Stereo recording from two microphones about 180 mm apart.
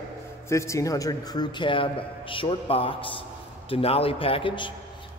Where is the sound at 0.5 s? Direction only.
15° left (ahead or behind).